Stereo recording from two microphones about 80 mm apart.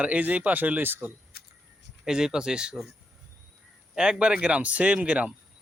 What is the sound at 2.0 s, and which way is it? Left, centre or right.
Speech, centre.